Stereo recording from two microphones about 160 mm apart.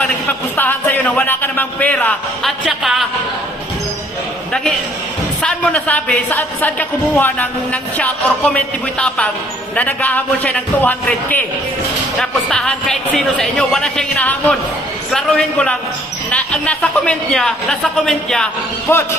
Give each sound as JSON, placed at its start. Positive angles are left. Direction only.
{"t": 0.0, "sound": "speech", "side_deg": 10}
{"t": 2.6, "sound": "speech", "side_deg": 0}
{"t": 5.4, "sound": "a woman's voice", "side_deg": 5}
{"t": 18.9, "sound": "a woman's voice", "side_deg": 15}